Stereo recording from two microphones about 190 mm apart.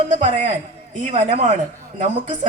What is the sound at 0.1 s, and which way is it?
A woman's voice, 40° right (ahead or behind).